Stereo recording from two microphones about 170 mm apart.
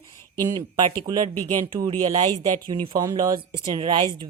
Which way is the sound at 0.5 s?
25° right (ahead or behind).